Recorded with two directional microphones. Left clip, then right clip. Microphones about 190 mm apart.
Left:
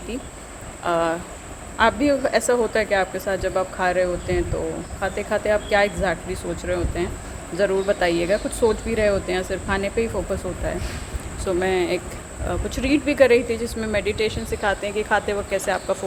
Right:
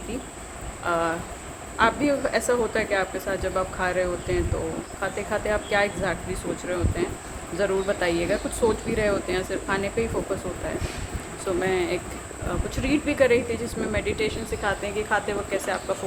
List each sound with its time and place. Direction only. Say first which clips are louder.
0.9 s speech: left 3 dB; 20° left (ahead or behind)
11.4 s speech: left 3 dB; 25° left (ahead or behind)